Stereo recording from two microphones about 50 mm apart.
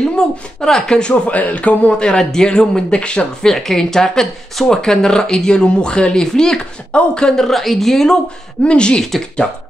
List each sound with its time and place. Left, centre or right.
0.6 s speech: centre
1.1 s a man's voice: left
3.4 s speech: centre
8.6 s a man's voice: centre